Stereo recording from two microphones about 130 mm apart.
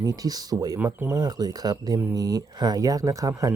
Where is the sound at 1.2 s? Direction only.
30° right (ahead or behind).